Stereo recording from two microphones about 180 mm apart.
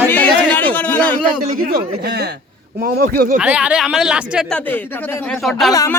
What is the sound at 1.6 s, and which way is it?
Speech, 60° right (ahead or behind).